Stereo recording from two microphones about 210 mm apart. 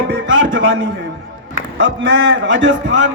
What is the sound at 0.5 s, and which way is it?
A man's voice, 60° right (ahead or behind).